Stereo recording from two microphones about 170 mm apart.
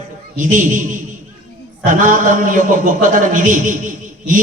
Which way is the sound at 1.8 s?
50° right (ahead or behind).